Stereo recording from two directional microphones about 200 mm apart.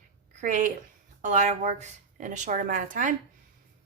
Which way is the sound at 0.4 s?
40° right (ahead or behind).